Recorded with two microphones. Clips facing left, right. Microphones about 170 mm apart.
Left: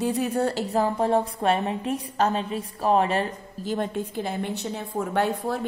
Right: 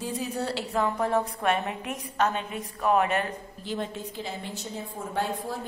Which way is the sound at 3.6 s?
50° left (ahead or behind).